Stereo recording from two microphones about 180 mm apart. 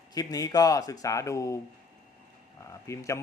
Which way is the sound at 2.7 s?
15° left (ahead or behind).